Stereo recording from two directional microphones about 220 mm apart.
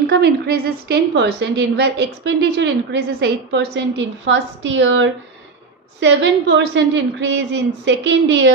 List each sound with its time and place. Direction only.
0.0 s a woman's voice: 45° right (ahead or behind)